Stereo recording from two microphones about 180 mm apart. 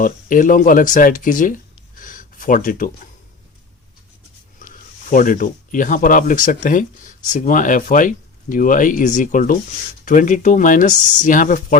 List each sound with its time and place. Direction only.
0.0 s speech: 50° left (ahead or behind)
4.7 s speech: 45° left (ahead or behind)